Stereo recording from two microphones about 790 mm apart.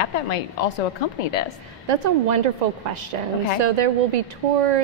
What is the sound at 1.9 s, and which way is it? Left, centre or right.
A woman's voice, right.